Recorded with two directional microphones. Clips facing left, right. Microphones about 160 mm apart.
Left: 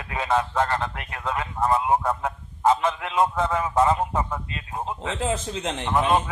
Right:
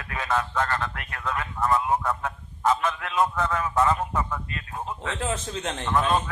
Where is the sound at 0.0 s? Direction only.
25° left (ahead or behind).